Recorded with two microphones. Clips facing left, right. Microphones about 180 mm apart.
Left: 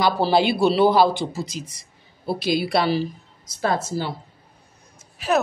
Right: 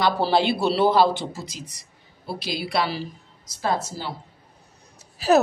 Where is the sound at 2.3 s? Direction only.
55° left (ahead or behind).